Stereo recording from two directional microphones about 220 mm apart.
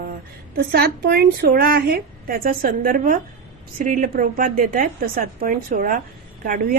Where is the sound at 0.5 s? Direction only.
45° right (ahead or behind).